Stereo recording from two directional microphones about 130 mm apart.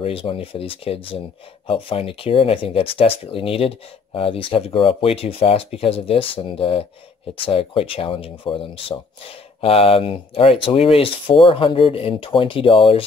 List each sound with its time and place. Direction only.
0.0 s speech: 45° left (ahead or behind)